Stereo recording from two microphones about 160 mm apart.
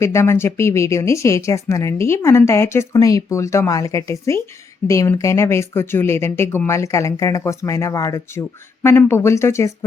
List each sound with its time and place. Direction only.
0.0 s speech: 15° left (ahead or behind)